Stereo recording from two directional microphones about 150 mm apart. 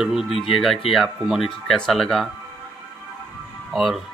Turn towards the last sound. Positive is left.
turn(degrees=0)  # may be behind; listen again after turning